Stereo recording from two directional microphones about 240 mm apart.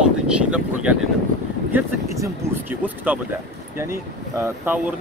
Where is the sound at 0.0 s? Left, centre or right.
Centre.